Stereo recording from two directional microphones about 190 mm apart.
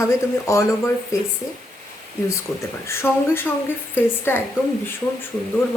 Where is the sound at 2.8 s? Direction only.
15° left (ahead or behind).